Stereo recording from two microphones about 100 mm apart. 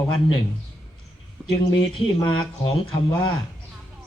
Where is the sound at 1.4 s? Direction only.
5° left (ahead or behind).